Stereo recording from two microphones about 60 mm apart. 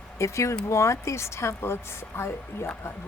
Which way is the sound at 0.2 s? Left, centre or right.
Left.